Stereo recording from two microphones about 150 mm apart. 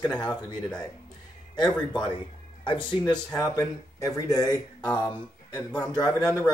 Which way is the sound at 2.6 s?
35° left (ahead or behind).